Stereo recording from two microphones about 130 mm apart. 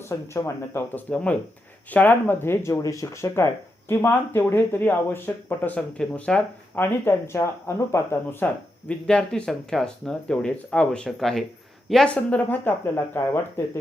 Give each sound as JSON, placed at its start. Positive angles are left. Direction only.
{"t": 0.1, "sound": "speech", "side_deg": 25}
{"t": 1.1, "sound": "speech", "side_deg": 10}
{"t": 8.9, "sound": "speech", "side_deg": 5}